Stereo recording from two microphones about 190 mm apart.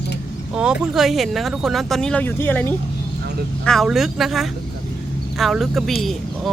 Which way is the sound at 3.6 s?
Centre (ahead or behind).